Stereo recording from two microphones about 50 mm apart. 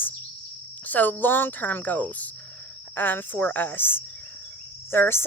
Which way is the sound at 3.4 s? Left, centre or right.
Left.